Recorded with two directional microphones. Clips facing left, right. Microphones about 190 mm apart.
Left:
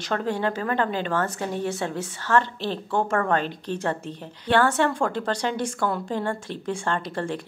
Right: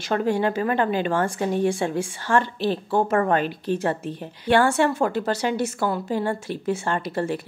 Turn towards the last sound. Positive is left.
turn(degrees=-10)  # may be behind; listen again after turning